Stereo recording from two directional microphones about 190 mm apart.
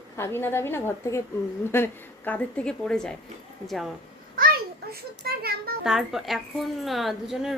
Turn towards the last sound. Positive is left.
turn(degrees=0)  # may be behind; listen again after turning